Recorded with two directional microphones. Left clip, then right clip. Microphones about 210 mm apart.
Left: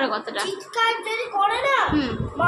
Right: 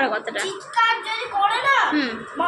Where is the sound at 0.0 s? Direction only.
10° left (ahead or behind).